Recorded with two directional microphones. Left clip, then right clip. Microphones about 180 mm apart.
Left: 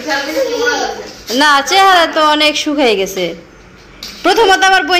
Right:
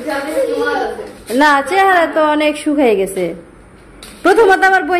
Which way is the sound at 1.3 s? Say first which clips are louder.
Left 2 dB; 15° right (ahead or behind).